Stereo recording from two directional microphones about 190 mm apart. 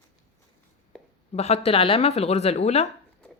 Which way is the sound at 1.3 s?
35° left (ahead or behind).